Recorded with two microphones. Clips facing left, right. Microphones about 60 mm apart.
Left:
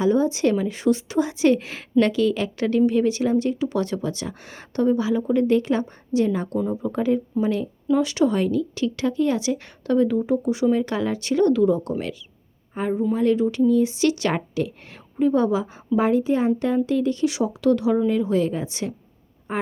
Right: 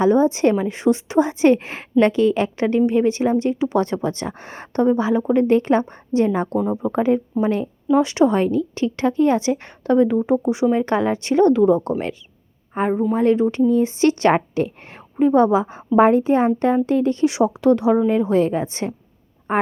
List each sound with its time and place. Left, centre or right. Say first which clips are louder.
0.0 s a woman's voice: right 4 dB; right